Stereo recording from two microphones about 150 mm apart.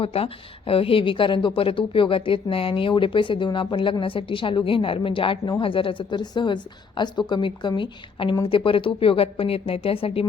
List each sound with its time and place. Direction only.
0.0 s speech: 40° left (ahead or behind)